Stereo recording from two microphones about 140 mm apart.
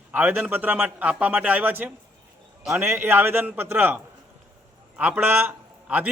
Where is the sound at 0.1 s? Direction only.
15° right (ahead or behind).